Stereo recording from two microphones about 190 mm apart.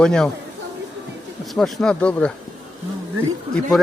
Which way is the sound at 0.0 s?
5° left (ahead or behind).